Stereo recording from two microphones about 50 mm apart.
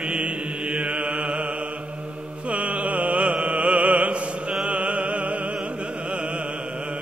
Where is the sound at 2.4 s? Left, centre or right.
Right.